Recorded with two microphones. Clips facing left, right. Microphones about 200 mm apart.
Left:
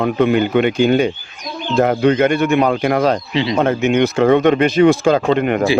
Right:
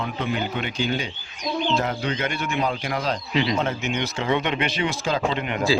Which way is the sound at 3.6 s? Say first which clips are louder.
Left 11 dB; 55° left (ahead or behind).